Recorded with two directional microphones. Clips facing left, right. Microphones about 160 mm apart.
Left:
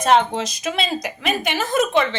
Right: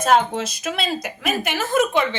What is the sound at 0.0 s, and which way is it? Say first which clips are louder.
A woman's voice: left 1 dB; 5° right (ahead or behind).